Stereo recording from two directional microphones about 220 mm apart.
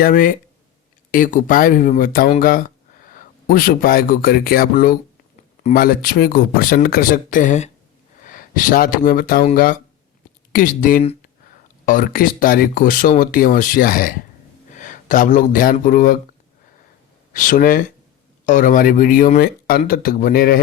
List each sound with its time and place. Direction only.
0.0 s speech: 40° left (ahead or behind)
17.3 s speech: 40° left (ahead or behind)